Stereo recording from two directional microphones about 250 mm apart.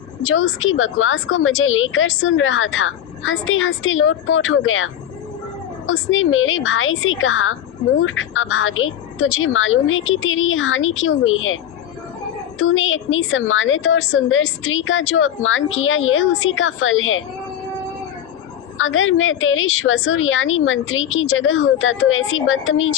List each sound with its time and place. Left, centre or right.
0.2 s a woman's voice: left
18.8 s a woman's voice: left